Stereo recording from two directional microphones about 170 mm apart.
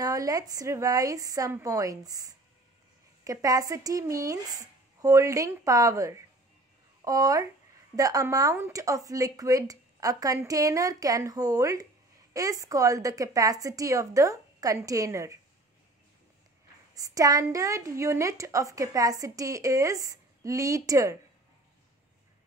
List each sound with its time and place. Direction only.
0.0 s a woman's voice: 20° right (ahead or behind)
16.9 s a woman's voice: 20° right (ahead or behind)